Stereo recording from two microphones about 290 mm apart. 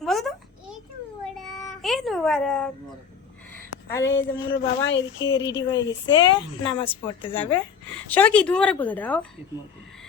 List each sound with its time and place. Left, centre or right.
0.0 s a sound: centre
3.9 s a woman's voice: centre
4.5 s speech: left
5.9 s a woman's voice: centre
8.1 s speech: centre